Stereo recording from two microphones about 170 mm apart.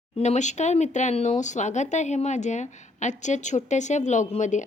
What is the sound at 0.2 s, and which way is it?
A woman's voice, 45° left (ahead or behind).